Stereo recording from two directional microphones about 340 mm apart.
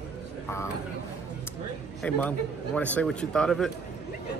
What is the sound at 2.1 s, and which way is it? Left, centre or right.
A man's voice, centre.